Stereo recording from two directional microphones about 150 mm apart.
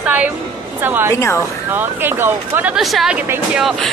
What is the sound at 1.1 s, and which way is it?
Speech, 20° left (ahead or behind).